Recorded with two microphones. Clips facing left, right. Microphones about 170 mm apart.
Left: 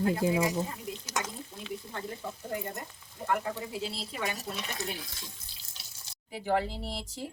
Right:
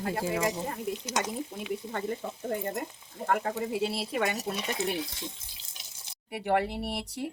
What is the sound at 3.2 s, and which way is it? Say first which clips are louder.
Speech: right 3 dB; 50° right (ahead or behind).